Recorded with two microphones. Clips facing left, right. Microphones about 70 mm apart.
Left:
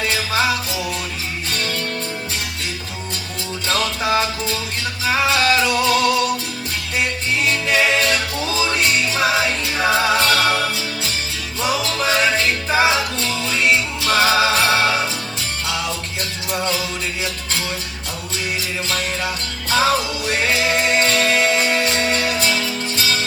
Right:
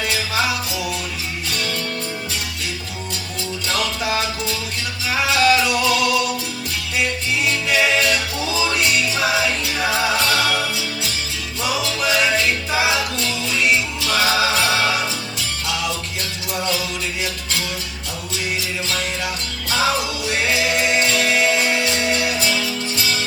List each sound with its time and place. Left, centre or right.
1.5 s music: left
3.7 s music: left
7.4 s music: left
16.5 s music: left
19.7 s music: left